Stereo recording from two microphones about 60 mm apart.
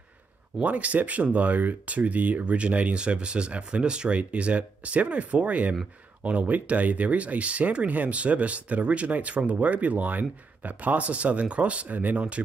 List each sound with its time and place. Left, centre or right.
0.6 s speech: right